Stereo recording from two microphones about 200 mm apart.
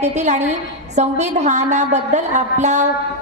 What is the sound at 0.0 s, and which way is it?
A woman's voice, 35° right (ahead or behind).